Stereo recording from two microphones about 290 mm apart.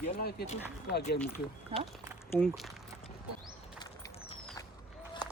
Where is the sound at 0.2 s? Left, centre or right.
Left.